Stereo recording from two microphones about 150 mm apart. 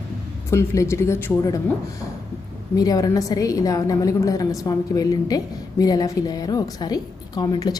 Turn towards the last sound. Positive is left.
turn(degrees=25)  # may be behind; listen again after turning